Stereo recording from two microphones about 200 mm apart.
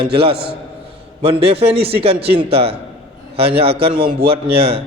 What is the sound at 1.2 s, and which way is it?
A man's voice, 30° right (ahead or behind).